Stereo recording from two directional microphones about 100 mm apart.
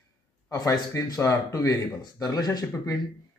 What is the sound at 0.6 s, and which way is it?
Speech, 35° left (ahead or behind).